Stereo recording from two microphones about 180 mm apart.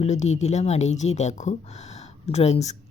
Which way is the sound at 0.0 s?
40° left (ahead or behind).